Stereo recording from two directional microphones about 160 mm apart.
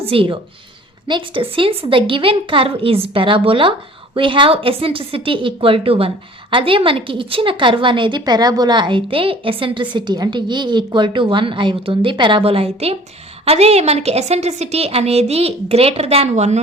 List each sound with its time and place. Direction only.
0.0 s a woman's voice: 35° right (ahead or behind)